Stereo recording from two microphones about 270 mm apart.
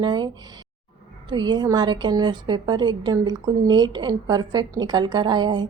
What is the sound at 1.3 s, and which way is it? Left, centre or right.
A woman's voice, centre.